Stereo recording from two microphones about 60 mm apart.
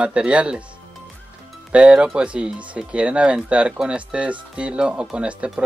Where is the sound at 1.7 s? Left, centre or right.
Centre.